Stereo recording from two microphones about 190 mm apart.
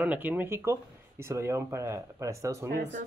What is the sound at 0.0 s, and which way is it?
Speech, 10° right (ahead or behind).